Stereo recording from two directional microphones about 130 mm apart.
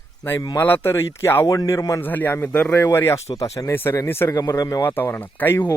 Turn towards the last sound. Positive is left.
turn(degrees=15)  # may be behind; listen again after turning